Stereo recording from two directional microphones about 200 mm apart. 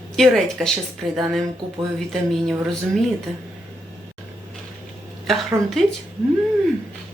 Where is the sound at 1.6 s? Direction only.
25° right (ahead or behind).